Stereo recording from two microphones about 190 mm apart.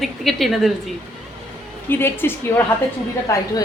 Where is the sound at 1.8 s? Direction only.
10° left (ahead or behind).